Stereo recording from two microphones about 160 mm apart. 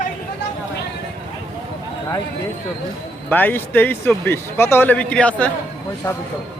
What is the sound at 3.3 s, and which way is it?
Speech, 10° left (ahead or behind).